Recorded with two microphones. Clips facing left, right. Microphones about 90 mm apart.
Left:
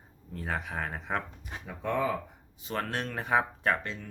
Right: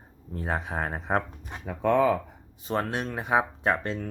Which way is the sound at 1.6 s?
60° right (ahead or behind).